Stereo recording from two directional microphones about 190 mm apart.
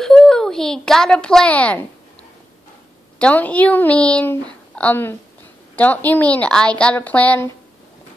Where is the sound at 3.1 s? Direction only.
5° left (ahead or behind).